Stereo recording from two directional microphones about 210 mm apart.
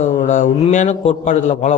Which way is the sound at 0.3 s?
35° left (ahead or behind).